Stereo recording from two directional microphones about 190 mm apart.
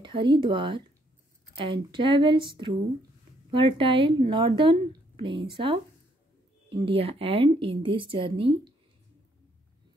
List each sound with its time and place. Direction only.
0.0 s a woman's voice: 25° right (ahead or behind)